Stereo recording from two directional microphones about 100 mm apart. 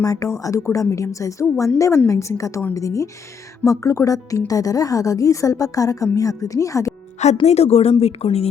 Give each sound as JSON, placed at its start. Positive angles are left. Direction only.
{"t": 0.0, "sound": "a woman's voice", "side_deg": 35}
{"t": 7.4, "sound": "speech", "side_deg": 90}